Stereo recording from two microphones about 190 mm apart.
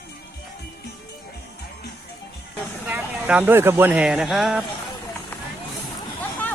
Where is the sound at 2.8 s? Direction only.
10° right (ahead or behind).